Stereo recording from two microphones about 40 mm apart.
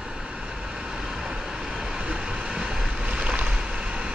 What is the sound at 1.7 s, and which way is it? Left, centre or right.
Vehicle, centre.